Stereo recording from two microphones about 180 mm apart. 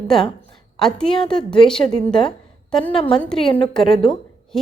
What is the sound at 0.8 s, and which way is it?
A woman's voice, 5° left (ahead or behind).